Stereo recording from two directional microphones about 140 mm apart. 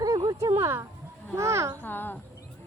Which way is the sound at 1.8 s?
15° left (ahead or behind).